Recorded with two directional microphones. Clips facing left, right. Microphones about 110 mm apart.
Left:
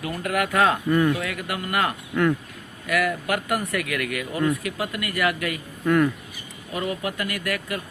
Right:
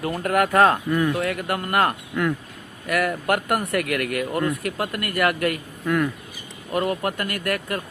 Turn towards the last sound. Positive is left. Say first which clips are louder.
# right 2 dB
turn(degrees=-45)  # may be behind; listen again after turning